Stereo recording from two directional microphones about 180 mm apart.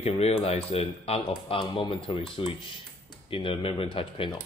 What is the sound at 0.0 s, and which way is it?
Speech, 35° left (ahead or behind).